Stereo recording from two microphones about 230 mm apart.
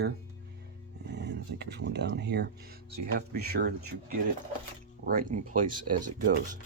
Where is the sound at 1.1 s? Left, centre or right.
Right.